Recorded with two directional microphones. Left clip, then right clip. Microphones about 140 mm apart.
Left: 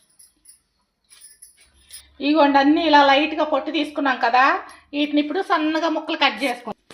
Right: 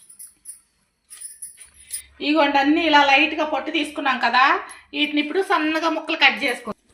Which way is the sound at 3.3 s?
75° left (ahead or behind).